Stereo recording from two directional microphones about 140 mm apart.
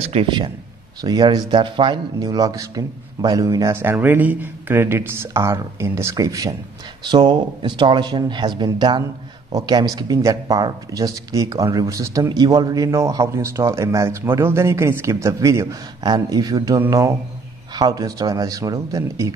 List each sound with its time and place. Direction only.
0.1 s speech: 35° right (ahead or behind)